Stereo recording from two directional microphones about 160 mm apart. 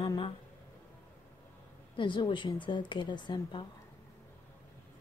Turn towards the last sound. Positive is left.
turn(degrees=30)  # may be behind; listen again after turning